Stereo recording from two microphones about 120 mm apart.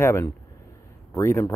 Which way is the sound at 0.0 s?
20° left (ahead or behind).